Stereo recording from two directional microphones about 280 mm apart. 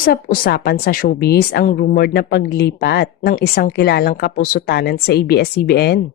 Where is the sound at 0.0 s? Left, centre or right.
Left.